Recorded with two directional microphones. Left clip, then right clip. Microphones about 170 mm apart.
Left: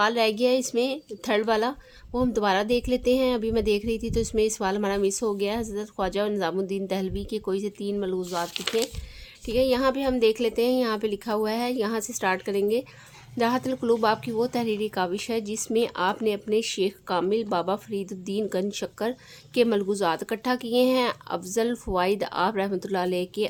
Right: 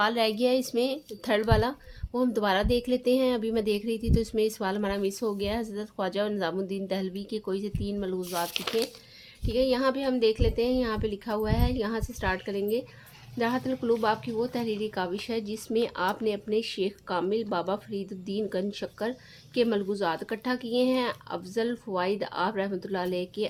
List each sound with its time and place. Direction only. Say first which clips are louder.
0.0 s speech: left 3 dB; 25° left (ahead or behind)